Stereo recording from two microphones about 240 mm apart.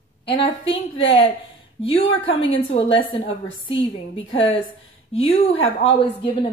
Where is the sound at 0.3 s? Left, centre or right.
Left.